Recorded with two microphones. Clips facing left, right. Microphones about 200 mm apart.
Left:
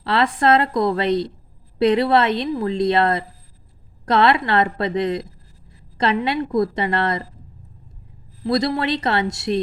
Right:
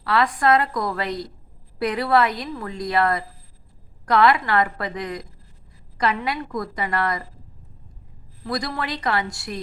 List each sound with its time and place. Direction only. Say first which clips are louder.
0.0 s a woman's voice: left 2 dB; 25° left (ahead or behind)
8.4 s a woman's voice: left 8 dB; 25° left (ahead or behind)